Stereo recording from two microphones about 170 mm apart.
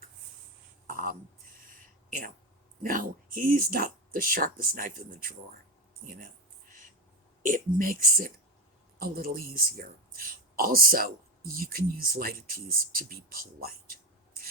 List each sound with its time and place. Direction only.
0.9 s a sound: 55° right (ahead or behind)
2.8 s speech: 55° right (ahead or behind)
7.4 s speech: 55° right (ahead or behind)